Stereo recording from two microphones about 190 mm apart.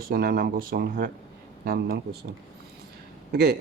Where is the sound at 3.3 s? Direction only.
60° right (ahead or behind).